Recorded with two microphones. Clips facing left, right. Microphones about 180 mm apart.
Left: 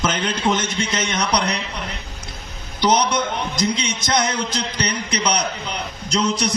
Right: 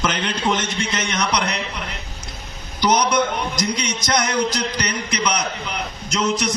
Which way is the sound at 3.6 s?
25° left (ahead or behind).